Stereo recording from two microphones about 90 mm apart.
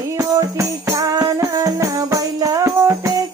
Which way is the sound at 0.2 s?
35° right (ahead or behind).